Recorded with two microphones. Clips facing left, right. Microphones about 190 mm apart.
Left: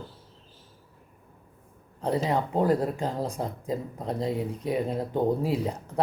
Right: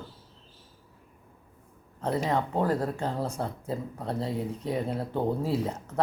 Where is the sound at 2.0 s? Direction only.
15° left (ahead or behind).